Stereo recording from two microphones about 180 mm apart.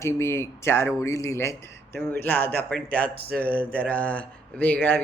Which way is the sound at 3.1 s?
60° right (ahead or behind).